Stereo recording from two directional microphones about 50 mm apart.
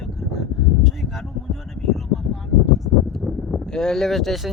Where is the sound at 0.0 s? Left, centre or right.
Centre.